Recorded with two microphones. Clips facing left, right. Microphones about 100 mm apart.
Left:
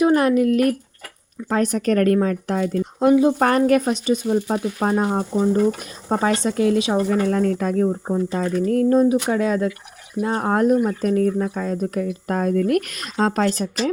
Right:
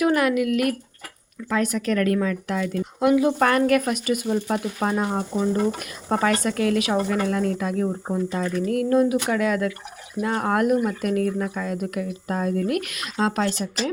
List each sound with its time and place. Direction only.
0.0 s speech: 35° left (ahead or behind)
7.9 s speech: 15° left (ahead or behind)
8.3 s speech: 35° left (ahead or behind)